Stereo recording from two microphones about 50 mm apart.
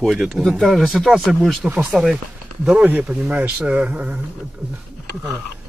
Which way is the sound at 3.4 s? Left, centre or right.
Right.